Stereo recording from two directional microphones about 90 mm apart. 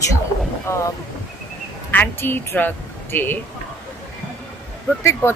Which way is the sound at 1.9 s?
20° left (ahead or behind).